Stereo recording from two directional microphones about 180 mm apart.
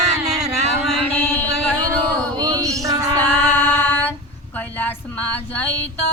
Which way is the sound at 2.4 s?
20° right (ahead or behind).